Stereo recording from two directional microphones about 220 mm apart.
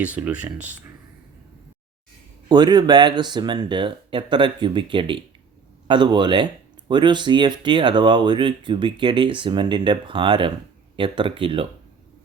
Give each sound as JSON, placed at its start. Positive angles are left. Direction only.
{"t": 0.0, "sound": "speech", "side_deg": -5}
{"t": 2.5, "sound": "speech", "side_deg": -20}